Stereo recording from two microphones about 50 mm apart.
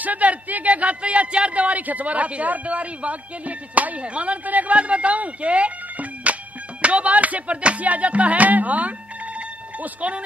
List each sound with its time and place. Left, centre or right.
0.0 s speech: right